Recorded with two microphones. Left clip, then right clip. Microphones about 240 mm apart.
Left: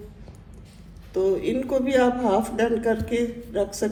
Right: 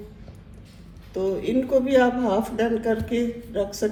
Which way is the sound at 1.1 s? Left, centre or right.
Left.